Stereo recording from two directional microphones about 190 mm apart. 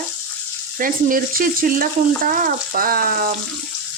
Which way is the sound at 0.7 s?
45° right (ahead or behind).